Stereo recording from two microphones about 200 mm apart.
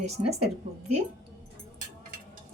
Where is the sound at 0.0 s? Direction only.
35° right (ahead or behind).